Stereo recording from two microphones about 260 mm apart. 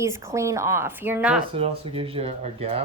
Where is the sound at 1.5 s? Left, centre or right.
Right.